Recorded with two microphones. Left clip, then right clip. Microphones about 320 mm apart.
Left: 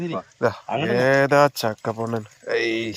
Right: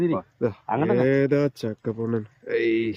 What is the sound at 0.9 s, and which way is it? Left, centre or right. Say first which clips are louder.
Speech: left 5 dB; centre.